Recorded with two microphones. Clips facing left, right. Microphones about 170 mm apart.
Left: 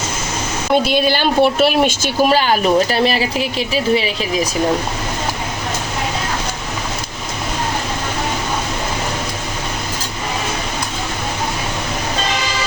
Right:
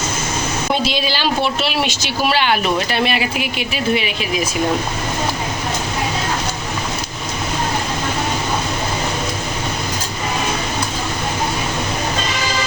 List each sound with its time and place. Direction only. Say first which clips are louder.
0.9 s speech: left 4 dB; 55° left (ahead or behind); by 4.1 s 35° left (ahead or behind)